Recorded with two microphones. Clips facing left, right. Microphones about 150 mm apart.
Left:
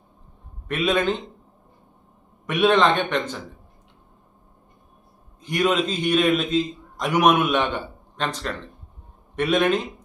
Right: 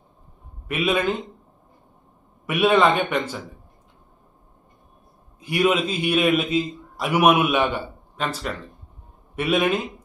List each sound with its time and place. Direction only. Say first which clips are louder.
0.7 s a man's voice: even; 10° right (ahead or behind)
2.5 s a man's voice: even; 5° right (ahead or behind)
5.4 s a man's voice: right 1 dB; 10° right (ahead or behind)